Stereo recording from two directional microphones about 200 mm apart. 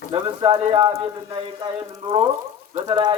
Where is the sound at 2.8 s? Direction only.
25° right (ahead or behind).